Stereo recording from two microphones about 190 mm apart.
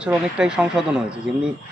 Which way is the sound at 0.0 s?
5° right (ahead or behind).